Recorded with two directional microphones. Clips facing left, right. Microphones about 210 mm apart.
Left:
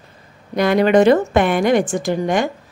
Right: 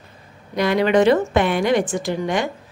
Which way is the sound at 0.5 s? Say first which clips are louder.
Left 3 dB; 50° left (ahead or behind).